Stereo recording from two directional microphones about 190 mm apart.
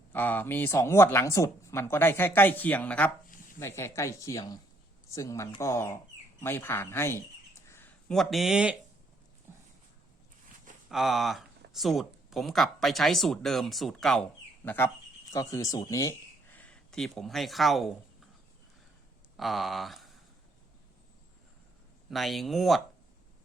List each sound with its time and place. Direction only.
0.1 s speech: 10° left (ahead or behind)
10.8 s speech: centre (ahead or behind)
19.4 s speech: centre (ahead or behind)
22.1 s speech: centre (ahead or behind)